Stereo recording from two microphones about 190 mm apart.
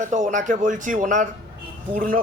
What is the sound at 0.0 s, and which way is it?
A man's voice, 40° right (ahead or behind).